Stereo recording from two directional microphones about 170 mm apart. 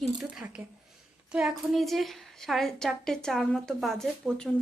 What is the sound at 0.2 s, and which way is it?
A woman's voice, 5° right (ahead or behind).